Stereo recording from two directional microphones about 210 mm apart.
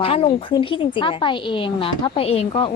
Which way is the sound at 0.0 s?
25° left (ahead or behind).